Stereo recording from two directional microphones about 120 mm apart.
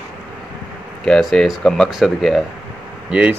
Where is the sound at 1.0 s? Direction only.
5° left (ahead or behind).